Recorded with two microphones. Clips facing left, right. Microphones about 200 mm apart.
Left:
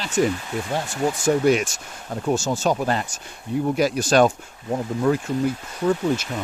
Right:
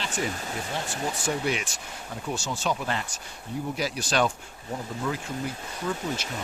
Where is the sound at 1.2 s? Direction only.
45° left (ahead or behind).